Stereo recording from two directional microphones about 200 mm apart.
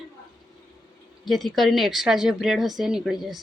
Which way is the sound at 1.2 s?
Centre (ahead or behind).